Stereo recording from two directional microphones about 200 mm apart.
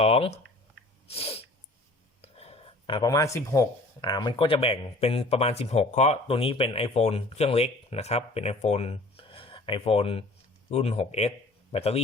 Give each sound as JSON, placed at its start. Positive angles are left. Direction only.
{"t": 0.0, "sound": "speech", "side_deg": 30}